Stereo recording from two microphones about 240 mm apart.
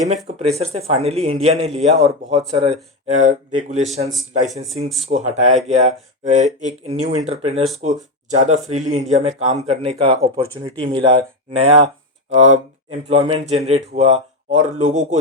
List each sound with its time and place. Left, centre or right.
0.3 s speech: right
5.0 s speech: right